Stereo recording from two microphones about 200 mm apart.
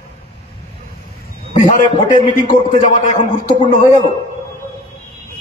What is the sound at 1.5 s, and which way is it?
A man's voice, 35° left (ahead or behind).